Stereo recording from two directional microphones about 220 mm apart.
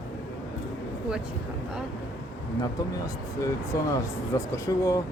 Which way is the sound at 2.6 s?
15° left (ahead or behind).